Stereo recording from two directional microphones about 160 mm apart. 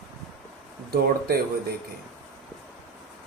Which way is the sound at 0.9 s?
75° right (ahead or behind).